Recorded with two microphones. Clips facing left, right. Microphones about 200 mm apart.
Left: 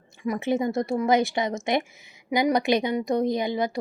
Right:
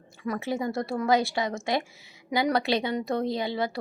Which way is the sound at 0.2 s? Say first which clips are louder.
Left 4 dB; 15° left (ahead or behind).